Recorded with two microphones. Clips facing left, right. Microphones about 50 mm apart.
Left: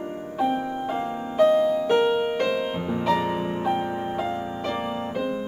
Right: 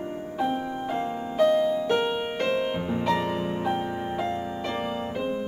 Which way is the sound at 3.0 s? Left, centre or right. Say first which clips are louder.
Left 3 dB; centre.